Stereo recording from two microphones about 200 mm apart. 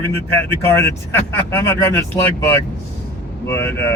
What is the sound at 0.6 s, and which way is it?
Speech, 10° left (ahead or behind).